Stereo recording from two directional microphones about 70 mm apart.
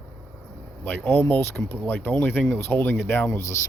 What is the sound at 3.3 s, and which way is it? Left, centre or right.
Speech, left.